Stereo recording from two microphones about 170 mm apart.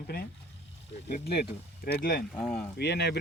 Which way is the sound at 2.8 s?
75° left (ahead or behind).